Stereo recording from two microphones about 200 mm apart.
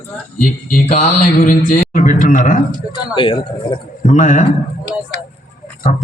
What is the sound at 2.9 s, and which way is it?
Speech, 25° left (ahead or behind).